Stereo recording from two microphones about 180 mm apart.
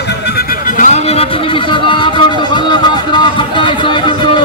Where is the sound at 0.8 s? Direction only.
35° left (ahead or behind).